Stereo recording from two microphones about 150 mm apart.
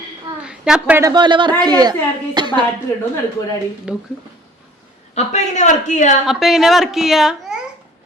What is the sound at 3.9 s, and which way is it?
Speech, 5° right (ahead or behind).